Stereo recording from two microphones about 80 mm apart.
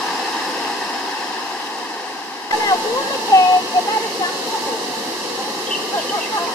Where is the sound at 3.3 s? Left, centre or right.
Left.